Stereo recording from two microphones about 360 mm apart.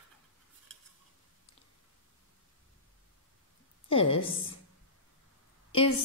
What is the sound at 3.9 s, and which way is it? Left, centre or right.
Speech, centre.